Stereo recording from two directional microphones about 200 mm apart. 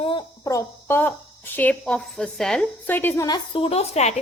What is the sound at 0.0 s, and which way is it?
A woman's voice, 25° left (ahead or behind).